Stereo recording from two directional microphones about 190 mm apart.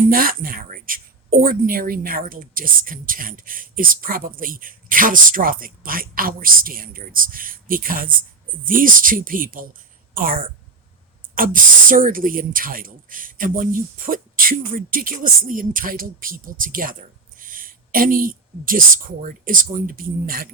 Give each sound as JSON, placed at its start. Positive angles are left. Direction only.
{"t": 0.1, "sound": "speech", "side_deg": -50}